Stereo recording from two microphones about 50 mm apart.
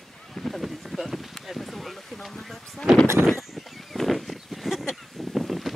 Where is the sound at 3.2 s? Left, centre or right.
Centre.